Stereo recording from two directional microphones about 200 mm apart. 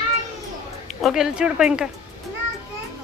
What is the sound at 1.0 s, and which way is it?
Speech, centre (ahead or behind).